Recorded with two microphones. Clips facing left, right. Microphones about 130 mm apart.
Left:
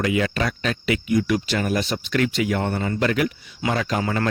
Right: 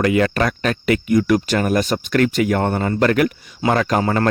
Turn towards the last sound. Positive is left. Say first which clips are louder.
# right 6 dB
turn(degrees=-45)  # may be behind; listen again after turning